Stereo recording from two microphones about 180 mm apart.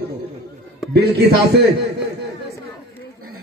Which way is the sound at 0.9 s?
60° right (ahead or behind).